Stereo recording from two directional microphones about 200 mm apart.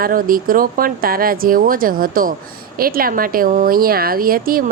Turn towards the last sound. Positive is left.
turn(degrees=-45)  # may be behind; listen again after turning